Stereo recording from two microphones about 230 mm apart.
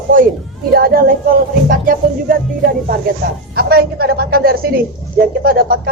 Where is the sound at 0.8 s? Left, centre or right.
Right.